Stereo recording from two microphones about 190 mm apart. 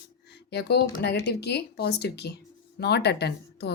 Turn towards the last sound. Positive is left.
turn(degrees=60)  # may be behind; listen again after turning